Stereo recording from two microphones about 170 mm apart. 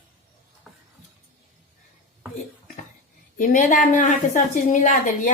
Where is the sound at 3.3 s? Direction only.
50° left (ahead or behind).